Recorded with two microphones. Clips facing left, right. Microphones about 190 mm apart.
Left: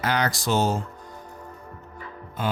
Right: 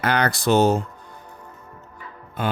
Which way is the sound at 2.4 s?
60° right (ahead or behind).